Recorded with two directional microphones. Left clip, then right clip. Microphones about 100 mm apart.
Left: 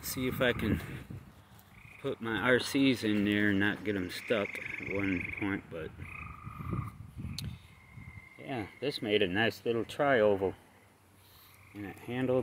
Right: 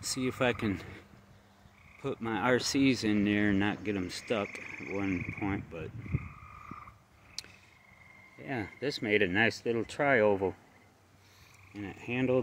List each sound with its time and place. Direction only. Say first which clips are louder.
0.0 s speech: even; 30° right (ahead or behind)
2.0 s speech: even; 25° right (ahead or behind); by 5.9 s 10° right (ahead or behind)
8.5 s speech: right 1 dB; 35° right (ahead or behind)
9.0 s speech: right 2 dB; 25° right (ahead or behind)
11.7 s speech: right 3 dB; 30° right (ahead or behind)